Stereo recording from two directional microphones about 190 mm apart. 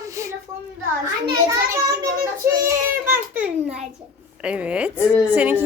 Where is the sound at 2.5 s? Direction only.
15° right (ahead or behind).